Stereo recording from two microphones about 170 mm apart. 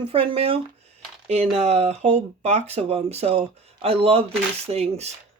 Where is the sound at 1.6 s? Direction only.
40° right (ahead or behind).